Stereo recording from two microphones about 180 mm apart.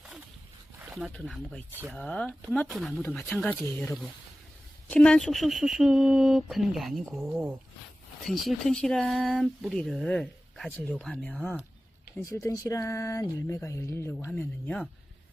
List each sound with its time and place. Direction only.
0.9 s a sound: centre (ahead or behind)
1.1 s speech: 5° left (ahead or behind)
3.0 s speech: 10° left (ahead or behind)
12.4 s speech: 15° left (ahead or behind)